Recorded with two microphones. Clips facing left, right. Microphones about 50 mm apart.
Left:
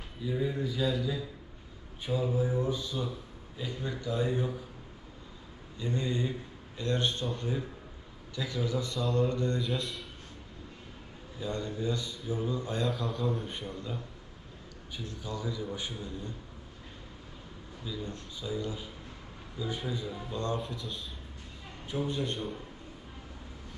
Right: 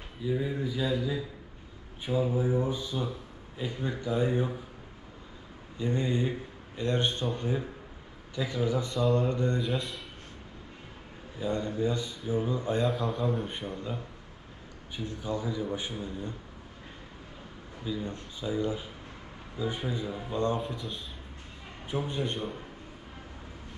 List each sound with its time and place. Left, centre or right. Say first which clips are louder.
0.2 s speech: right 1 dB; centre; by 4.5 s right
5.8 s speech: right 3 dB; right
9.0 s speech: right 2 dB; centre
9.3 s speech: right 2 dB; right
9.6 s a man's voice: right 2 dB; centre
11.3 s speech: right 5 dB; right
12.9 s a man's voice: right 3 dB; centre
13.5 s speech: right 3 dB; centre
14.9 s speech: right 5 dB; right
17.8 s speech: right 4 dB; right
20.6 s a man's voice: right 3 dB; centre
21.8 s speech: right 1 dB; right